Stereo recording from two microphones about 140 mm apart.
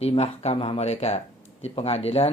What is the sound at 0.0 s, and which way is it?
A man's voice, 50° left (ahead or behind).